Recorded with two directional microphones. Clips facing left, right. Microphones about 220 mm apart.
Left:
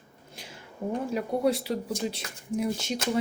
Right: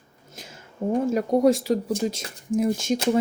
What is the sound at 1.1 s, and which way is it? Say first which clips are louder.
Speech: right 7 dB; 45° right (ahead or behind).